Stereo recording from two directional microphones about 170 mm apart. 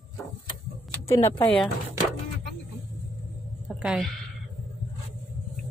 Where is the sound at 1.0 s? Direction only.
15° left (ahead or behind).